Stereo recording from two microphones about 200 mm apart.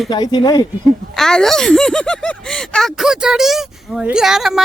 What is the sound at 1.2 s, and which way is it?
Speech, centre (ahead or behind).